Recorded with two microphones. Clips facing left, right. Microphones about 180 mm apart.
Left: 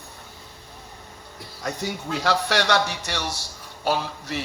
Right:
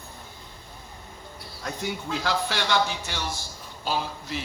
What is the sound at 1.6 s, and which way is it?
Speech, 75° left (ahead or behind).